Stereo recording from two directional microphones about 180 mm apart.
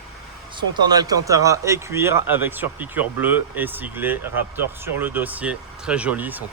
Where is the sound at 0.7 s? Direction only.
20° right (ahead or behind).